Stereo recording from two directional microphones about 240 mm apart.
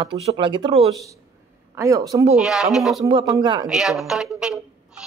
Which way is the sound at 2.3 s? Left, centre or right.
Centre.